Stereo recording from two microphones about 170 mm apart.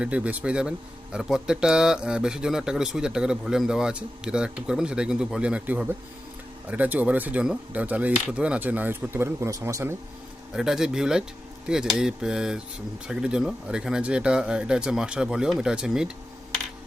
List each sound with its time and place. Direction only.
0.0 s speech: 5° right (ahead or behind)
10.5 s speech: 5° right (ahead or behind)